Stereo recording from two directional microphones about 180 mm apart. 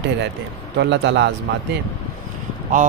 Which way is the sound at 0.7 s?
80° right.